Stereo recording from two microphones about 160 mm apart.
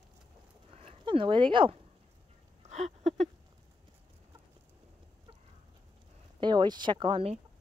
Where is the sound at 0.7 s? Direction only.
35° right (ahead or behind).